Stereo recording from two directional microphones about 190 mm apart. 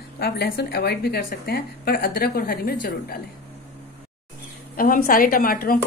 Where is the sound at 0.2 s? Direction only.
55° left (ahead or behind).